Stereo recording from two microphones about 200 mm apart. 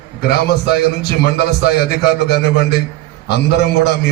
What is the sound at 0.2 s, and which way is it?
A man's voice, 55° left (ahead or behind).